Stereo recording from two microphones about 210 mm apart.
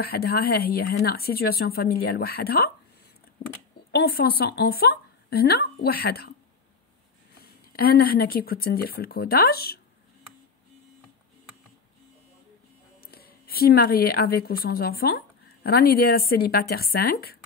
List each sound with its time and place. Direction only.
0.0 s speech: 45° left (ahead or behind)
3.9 s speech: 45° left (ahead or behind)
7.3 s speech: 45° left (ahead or behind)
13.0 s a woman's voice: 45° left (ahead or behind)